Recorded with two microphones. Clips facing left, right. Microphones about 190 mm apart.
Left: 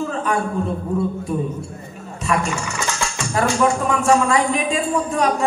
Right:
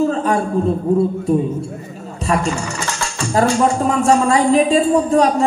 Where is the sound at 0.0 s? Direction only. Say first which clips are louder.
Right 6 dB; 35° right (ahead or behind).